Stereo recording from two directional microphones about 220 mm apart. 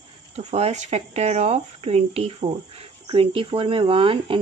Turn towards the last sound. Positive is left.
turn(degrees=-25)  # may be behind; listen again after turning